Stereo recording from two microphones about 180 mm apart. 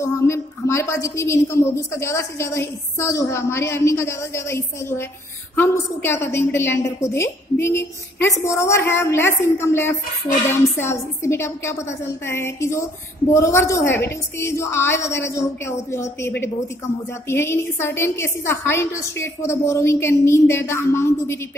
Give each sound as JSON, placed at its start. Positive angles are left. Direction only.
{"t": 0.0, "sound": "a woman's voice", "side_deg": 15}